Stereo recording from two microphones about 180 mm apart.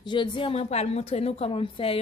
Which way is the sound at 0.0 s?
25° left (ahead or behind).